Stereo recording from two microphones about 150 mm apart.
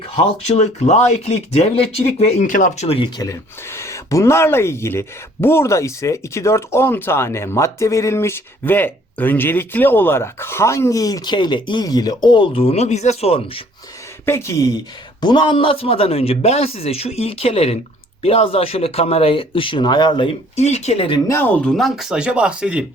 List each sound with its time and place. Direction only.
0.4 s speech: 50° left (ahead or behind)
2.5 s speech: 55° left (ahead or behind); by 3.1 s 40° left (ahead or behind)
3.2 s speech: 20° left (ahead or behind); by 13.6 s 40° left (ahead or behind)
14.3 s speech: 20° left (ahead or behind)
15.2 s speech: 30° left (ahead or behind)
21.2 s speech: 15° left (ahead or behind); by 22.9 s 5° right (ahead or behind)